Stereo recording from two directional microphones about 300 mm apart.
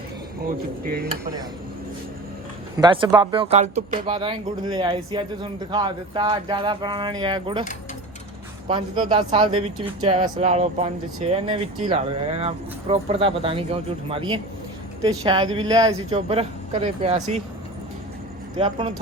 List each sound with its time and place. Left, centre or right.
0.9 s speech: right
2.7 s speech: centre
8.6 s speech: centre
18.5 s speech: centre